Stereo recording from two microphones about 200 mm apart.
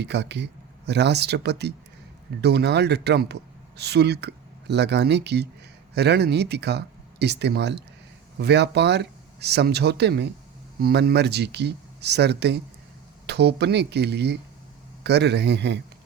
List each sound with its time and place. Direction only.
0.0 s speech: 60° right (ahead or behind)